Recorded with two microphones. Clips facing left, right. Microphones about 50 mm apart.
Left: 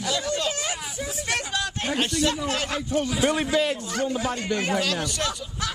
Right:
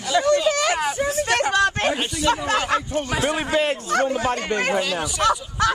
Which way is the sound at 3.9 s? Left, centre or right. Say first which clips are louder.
Right 6 dB; right.